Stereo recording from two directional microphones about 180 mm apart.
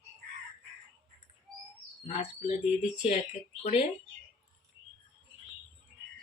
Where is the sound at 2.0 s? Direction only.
40° left (ahead or behind).